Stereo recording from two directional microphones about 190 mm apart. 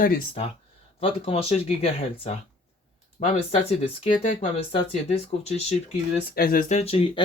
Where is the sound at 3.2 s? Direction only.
50° left (ahead or behind).